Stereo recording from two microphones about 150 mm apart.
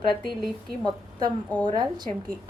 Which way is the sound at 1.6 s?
30° right (ahead or behind).